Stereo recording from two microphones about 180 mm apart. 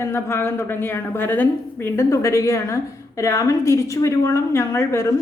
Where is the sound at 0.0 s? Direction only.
15° left (ahead or behind).